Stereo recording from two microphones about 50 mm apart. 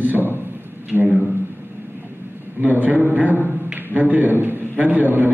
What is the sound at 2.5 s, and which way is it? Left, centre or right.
A man's voice, right.